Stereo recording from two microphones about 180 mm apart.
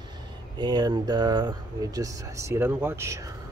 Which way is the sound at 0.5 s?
25° right (ahead or behind).